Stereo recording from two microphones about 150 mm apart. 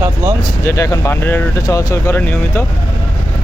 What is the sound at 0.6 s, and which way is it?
Speech, 20° left (ahead or behind).